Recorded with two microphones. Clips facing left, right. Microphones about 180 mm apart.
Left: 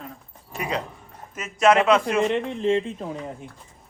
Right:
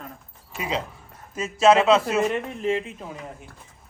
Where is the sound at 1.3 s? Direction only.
30° right (ahead or behind).